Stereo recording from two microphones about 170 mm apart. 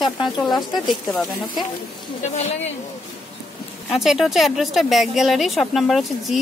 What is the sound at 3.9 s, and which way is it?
Speech, centre (ahead or behind).